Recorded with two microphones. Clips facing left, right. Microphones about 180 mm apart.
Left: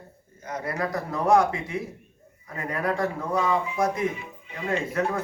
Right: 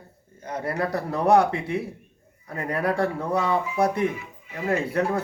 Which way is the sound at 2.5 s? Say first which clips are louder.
Right 2 dB; 35° right (ahead or behind).